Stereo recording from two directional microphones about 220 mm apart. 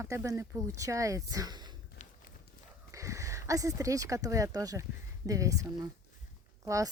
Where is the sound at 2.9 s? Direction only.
15° right (ahead or behind).